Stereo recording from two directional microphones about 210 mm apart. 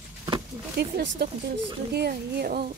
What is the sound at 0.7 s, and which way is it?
Speech, 55° right (ahead or behind).